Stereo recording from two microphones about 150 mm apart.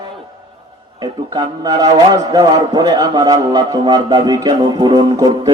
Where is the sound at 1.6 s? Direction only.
25° right (ahead or behind).